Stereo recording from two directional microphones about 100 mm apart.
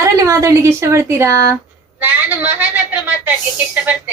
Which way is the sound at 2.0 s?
15° right (ahead or behind).